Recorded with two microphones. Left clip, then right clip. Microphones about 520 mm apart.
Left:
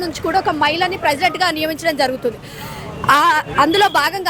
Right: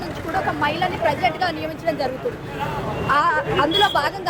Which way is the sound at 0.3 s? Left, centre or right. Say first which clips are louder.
Left 5 dB; left.